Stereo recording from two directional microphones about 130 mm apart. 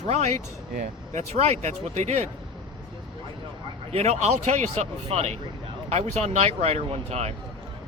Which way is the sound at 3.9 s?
55° right (ahead or behind).